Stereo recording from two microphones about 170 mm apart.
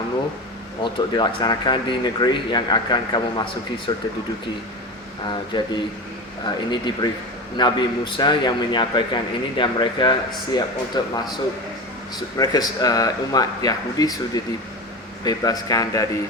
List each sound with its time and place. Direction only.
0.8 s a man's voice: 25° left (ahead or behind)
5.5 s a man's voice: 25° left (ahead or behind)
12.4 s a man's voice: 20° left (ahead or behind)
15.2 s a man's voice: 20° left (ahead or behind)